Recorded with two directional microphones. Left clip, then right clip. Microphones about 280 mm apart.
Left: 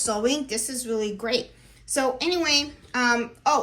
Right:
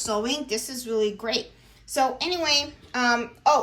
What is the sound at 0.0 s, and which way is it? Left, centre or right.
A woman's voice, centre.